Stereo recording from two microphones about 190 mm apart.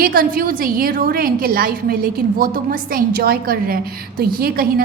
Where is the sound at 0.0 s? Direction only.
50° right (ahead or behind).